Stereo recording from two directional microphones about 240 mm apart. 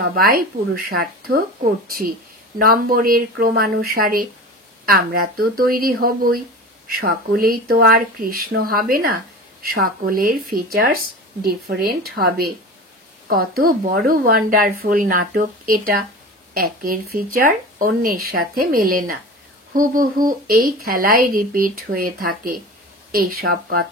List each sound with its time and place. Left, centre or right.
0.1 s speech: right